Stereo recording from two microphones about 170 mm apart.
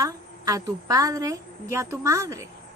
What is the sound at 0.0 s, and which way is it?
A woman's voice, 20° right (ahead or behind).